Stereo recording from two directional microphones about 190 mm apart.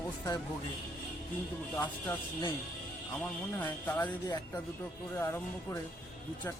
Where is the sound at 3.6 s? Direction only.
10° left (ahead or behind).